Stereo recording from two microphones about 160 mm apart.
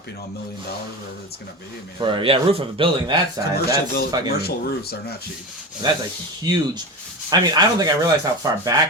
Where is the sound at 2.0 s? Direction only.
30° right (ahead or behind).